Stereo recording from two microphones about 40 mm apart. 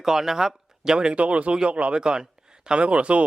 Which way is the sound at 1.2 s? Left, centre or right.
Right.